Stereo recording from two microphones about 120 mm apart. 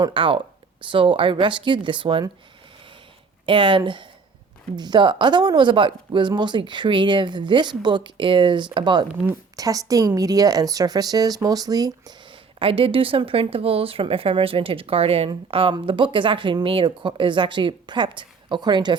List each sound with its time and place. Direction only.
0.0 s a woman's voice: 45° right (ahead or behind)
3.4 s a woman's voice: 45° right (ahead or behind)
12.5 s a woman's voice: 50° right (ahead or behind)